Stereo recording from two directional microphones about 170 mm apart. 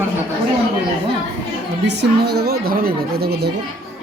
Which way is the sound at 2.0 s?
70° right (ahead or behind).